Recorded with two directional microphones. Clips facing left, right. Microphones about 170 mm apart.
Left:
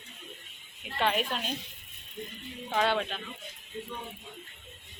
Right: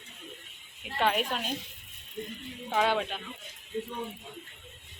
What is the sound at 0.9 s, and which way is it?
Speech, 10° right (ahead or behind).